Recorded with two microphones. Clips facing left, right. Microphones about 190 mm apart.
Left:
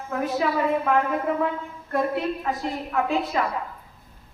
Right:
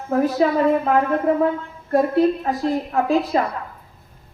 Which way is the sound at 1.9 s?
35° right (ahead or behind).